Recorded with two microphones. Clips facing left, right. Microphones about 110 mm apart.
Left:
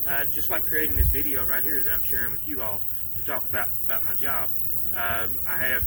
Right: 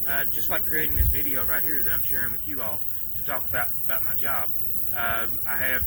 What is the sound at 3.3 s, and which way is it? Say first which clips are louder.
Speech: right 1 dB; 5° right (ahead or behind).